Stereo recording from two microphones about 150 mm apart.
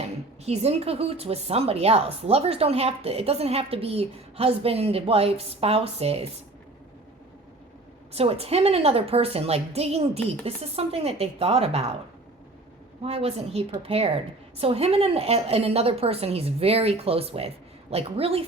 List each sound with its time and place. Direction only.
0.4 s speech: 45° right (ahead or behind)
8.1 s speech: 40° right (ahead or behind)
13.0 s speech: 40° right (ahead or behind)